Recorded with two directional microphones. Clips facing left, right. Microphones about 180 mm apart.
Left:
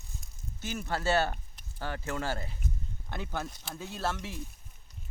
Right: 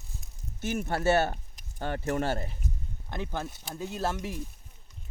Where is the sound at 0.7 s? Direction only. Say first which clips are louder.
Right 3 dB; 20° right (ahead or behind).